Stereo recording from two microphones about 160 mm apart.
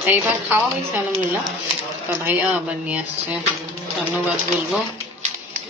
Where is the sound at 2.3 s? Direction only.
10° right (ahead or behind).